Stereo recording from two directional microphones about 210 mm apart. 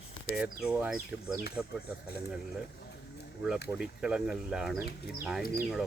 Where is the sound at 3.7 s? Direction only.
5° right (ahead or behind).